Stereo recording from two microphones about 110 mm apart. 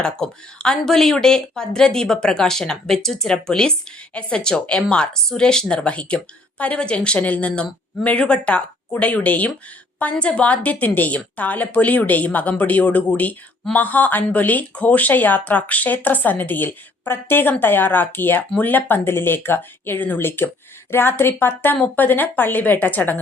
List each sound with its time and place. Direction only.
0.0 s speech: 5° left (ahead or behind)